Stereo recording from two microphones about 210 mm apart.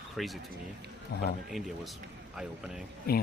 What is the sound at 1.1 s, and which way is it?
Speech, 50° left (ahead or behind).